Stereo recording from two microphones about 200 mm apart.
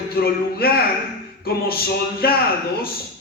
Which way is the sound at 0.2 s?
50° left (ahead or behind).